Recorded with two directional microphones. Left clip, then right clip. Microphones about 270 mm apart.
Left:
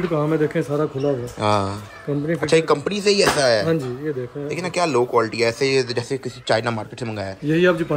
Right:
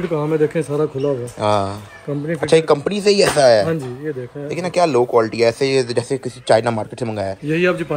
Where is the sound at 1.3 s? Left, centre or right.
Centre.